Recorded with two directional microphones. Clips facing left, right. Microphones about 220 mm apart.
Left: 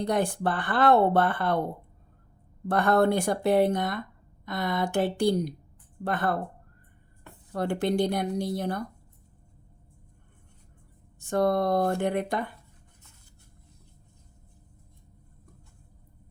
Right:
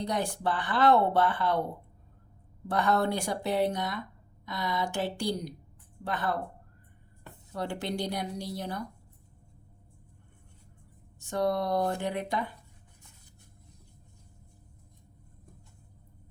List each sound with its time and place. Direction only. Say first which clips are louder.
0.0 s speech: left 5 dB; 55° left (ahead or behind)
2.6 s speech: left 5 dB; 55° left (ahead or behind)
7.5 s speech: left 7 dB; 55° left (ahead or behind)
11.2 s speech: left 4 dB; 50° left (ahead or behind)